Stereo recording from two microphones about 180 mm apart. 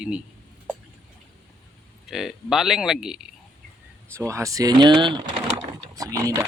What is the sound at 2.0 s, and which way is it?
Speech, centre (ahead or behind).